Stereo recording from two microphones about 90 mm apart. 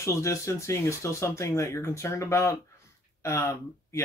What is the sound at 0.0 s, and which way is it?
Speech, 35° left (ahead or behind).